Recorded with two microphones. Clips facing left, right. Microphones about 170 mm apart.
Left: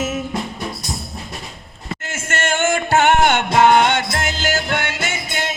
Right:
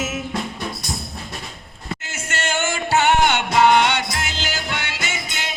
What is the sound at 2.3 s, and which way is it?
Music, 50° left (ahead or behind).